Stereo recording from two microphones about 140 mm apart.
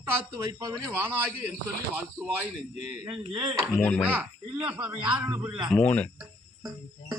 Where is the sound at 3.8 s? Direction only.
10° left (ahead or behind).